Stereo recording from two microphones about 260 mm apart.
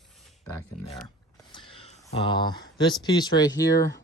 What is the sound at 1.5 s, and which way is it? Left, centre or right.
Speech, centre.